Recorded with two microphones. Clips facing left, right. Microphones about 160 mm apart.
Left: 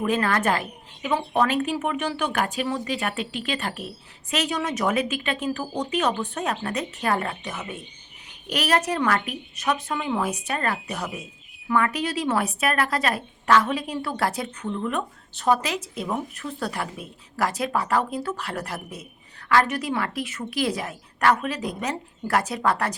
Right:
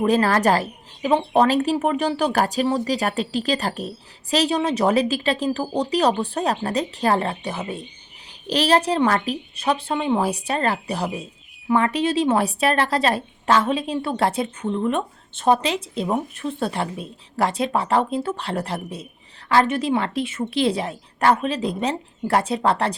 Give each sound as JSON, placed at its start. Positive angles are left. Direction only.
{"t": 0.0, "sound": "a woman's voice", "side_deg": -35}